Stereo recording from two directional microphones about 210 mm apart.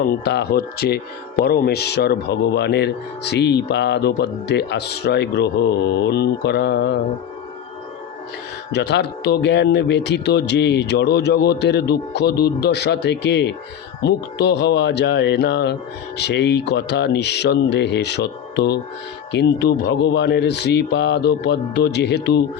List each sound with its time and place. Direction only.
0.0 s speech: 50° left (ahead or behind)
8.7 s speech: 55° left (ahead or behind)